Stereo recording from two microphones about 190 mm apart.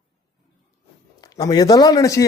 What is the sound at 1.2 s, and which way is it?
Speech, 20° left (ahead or behind).